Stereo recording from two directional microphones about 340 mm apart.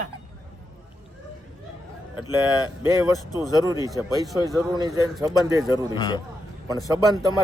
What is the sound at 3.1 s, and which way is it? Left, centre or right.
Speech, centre.